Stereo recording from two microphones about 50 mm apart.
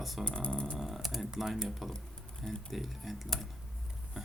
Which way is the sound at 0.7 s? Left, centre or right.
Centre.